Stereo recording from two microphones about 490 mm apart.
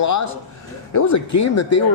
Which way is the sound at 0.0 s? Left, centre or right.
Left.